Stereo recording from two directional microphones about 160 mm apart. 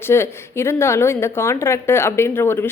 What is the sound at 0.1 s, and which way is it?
A woman's voice, 15° left (ahead or behind).